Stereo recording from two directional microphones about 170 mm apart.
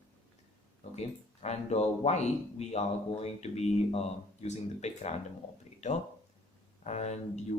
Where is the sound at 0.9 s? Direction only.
40° left (ahead or behind).